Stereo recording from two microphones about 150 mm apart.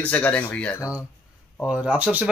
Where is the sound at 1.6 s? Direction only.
10° right (ahead or behind).